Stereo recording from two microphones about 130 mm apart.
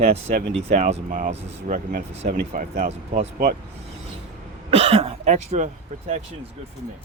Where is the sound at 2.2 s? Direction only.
60° right (ahead or behind).